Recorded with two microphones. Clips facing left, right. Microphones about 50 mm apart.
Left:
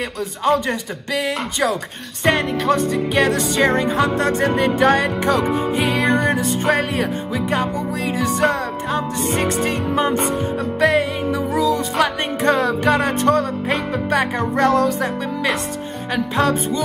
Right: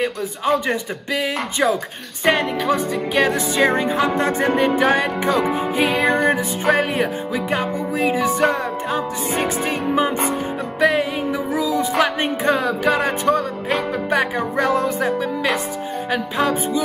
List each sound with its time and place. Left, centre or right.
0.0 s music: centre
6.0 s music: right
6.3 s music: centre
12.4 s music: centre
16.1 s music: centre